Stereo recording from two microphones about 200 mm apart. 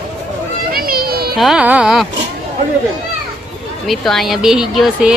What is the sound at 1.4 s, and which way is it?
Speech, 5° right (ahead or behind).